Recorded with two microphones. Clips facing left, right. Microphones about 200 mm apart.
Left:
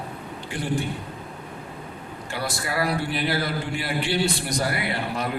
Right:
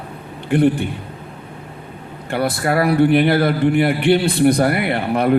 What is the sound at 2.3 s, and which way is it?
A man's voice, 60° right (ahead or behind).